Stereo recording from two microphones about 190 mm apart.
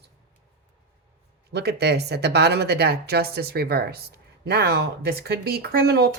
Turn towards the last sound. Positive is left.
turn(degrees=-55)  # may be behind; listen again after turning